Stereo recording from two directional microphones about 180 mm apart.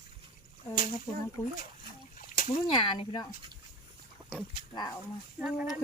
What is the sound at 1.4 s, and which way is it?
Speech, 5° left (ahead or behind).